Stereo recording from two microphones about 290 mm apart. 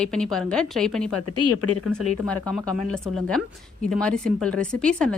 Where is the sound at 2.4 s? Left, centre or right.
Centre.